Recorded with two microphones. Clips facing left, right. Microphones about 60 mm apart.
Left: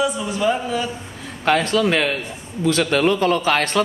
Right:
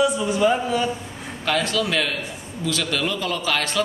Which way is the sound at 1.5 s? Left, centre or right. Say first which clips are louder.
Left 5 dB; left.